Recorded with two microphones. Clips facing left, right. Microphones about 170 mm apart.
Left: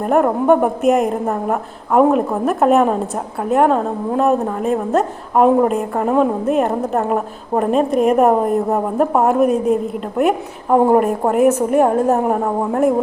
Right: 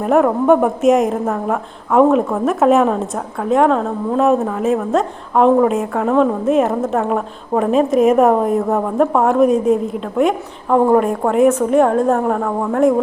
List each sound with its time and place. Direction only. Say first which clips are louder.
0.0 s a woman's voice: right 1 dB; centre (ahead or behind)
12.4 s speech: even; 20° left (ahead or behind)